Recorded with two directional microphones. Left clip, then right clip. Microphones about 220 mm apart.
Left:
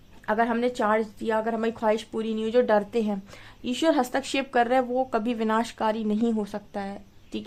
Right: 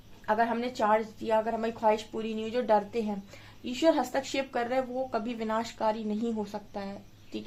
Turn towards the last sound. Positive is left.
turn(degrees=40)  # may be behind; listen again after turning